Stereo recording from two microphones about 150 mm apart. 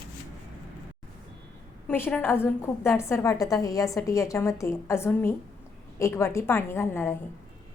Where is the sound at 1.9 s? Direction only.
10° left (ahead or behind).